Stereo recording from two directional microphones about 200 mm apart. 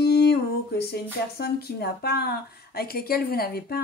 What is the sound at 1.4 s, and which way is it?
Speech, 50° left (ahead or behind).